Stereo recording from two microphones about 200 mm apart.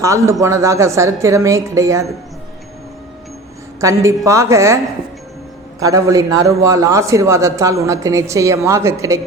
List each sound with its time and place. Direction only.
0.0 s speech: 15° right (ahead or behind)
3.8 s speech: 15° right (ahead or behind)
5.8 s speech: 15° right (ahead or behind)